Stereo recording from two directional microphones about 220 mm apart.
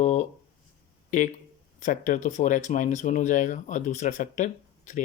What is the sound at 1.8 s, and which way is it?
Speech, 35° left (ahead or behind).